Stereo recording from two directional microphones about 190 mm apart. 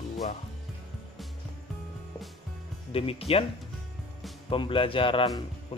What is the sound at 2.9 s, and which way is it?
Speech, 30° left (ahead or behind).